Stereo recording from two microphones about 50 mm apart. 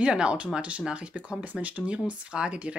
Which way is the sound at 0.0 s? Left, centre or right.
Centre.